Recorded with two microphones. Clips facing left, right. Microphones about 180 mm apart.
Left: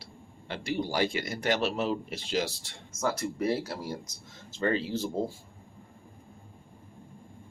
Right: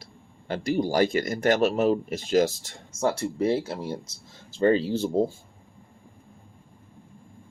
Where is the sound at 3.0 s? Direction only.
30° right (ahead or behind).